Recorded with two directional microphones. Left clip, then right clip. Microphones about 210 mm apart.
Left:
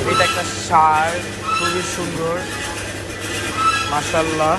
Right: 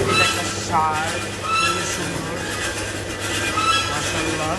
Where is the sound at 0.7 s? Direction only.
5° right (ahead or behind).